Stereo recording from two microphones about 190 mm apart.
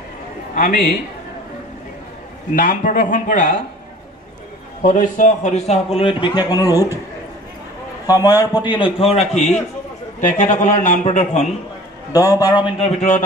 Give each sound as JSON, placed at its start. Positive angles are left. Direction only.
{"t": 0.6, "sound": "speech", "side_deg": 50}
{"t": 2.5, "sound": "speech", "side_deg": 45}
{"t": 4.8, "sound": "a man's voice", "side_deg": 40}
{"t": 8.1, "sound": "a man's voice", "side_deg": 20}
{"t": 12.1, "sound": "a man's voice", "side_deg": 20}